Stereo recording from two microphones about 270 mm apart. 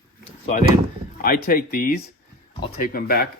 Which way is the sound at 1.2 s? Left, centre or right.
Left.